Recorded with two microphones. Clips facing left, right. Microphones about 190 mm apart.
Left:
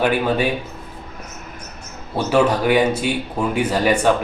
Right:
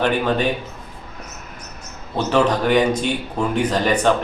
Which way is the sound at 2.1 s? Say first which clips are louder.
Left 1 dB; 10° left (ahead or behind).